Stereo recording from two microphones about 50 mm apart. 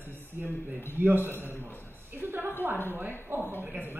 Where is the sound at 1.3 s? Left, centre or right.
Left.